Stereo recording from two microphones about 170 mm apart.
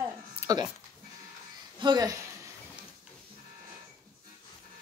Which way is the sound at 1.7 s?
25° right (ahead or behind).